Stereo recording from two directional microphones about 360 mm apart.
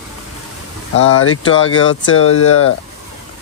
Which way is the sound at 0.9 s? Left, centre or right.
Left.